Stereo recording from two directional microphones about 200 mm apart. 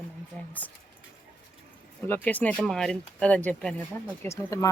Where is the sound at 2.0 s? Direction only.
10° left (ahead or behind).